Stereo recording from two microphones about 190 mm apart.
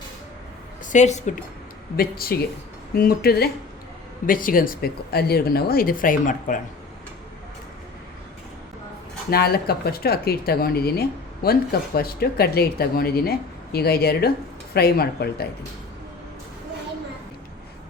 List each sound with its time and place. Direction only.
0.9 s speech: 40° left (ahead or behind)
2.0 s speech: 50° left (ahead or behind)
9.3 s speech: 55° left (ahead or behind)